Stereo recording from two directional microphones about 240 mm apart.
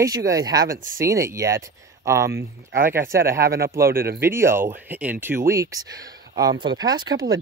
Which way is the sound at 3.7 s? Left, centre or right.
Right.